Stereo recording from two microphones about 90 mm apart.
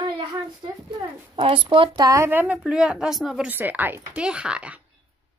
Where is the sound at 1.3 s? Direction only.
75° right (ahead or behind).